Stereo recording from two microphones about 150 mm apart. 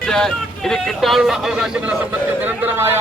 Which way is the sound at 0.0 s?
5° left (ahead or behind).